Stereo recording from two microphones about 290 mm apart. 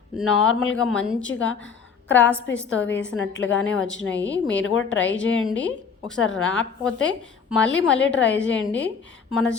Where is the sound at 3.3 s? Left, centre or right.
Left.